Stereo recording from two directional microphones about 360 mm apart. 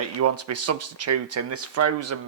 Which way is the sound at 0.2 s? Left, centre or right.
Right.